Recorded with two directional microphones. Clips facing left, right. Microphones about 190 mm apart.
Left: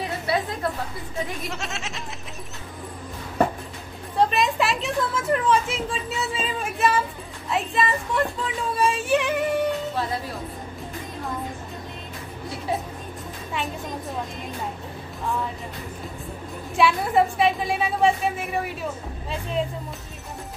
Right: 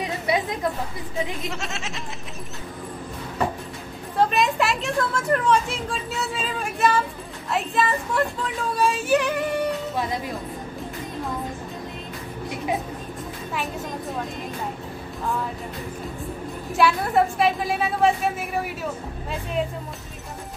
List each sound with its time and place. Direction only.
0.3 s chatter: 20° right (ahead or behind)
1.5 s speech: centre (ahead or behind)
4.2 s speech: centre (ahead or behind)
16.7 s speech: centre (ahead or behind)